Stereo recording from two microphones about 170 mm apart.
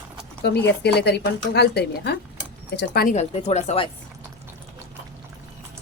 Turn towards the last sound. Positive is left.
turn(degrees=40)  # may be behind; listen again after turning